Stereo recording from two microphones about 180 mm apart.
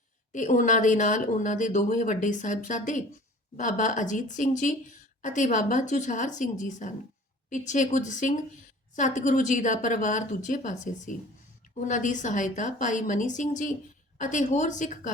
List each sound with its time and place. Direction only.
0.3 s speech: 45° left (ahead or behind)